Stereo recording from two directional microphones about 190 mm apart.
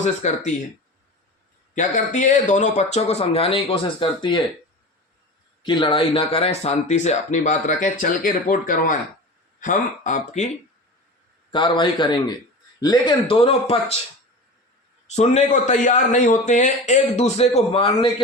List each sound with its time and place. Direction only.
0.0 s speech: 40° left (ahead or behind)
1.7 s speech: 40° left (ahead or behind)
5.6 s speech: 25° left (ahead or behind)
11.5 s speech: 25° left (ahead or behind)
15.0 s speech: 35° left (ahead or behind)